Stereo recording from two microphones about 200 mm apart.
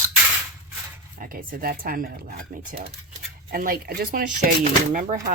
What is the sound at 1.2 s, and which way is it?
Speech, 45° right (ahead or behind).